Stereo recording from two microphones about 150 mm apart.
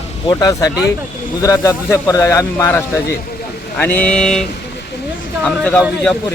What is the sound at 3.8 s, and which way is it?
A man's voice, 10° left (ahead or behind).